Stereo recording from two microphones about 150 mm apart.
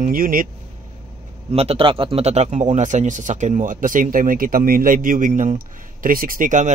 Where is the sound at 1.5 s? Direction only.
45° right (ahead or behind).